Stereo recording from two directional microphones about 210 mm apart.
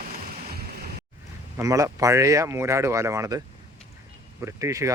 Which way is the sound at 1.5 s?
15° right (ahead or behind).